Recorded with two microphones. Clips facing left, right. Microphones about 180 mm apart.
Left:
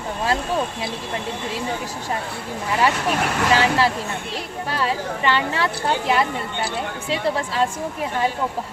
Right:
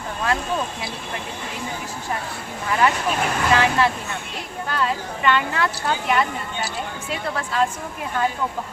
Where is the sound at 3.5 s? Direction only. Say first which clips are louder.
Even; 30° left (ahead or behind).